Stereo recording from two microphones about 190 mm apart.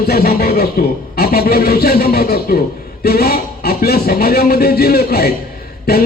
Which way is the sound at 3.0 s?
55° left (ahead or behind).